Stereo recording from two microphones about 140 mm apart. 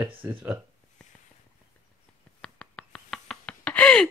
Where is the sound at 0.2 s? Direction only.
15° right (ahead or behind).